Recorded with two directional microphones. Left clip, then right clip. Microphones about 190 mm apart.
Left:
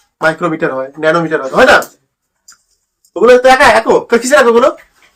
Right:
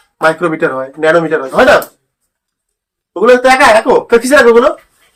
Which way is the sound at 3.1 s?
20° left (ahead or behind).